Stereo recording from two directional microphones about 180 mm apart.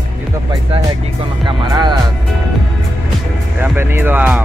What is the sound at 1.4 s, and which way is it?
Speech, 25° right (ahead or behind).